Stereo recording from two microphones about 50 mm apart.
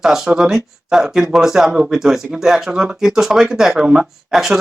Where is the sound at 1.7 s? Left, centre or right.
Centre.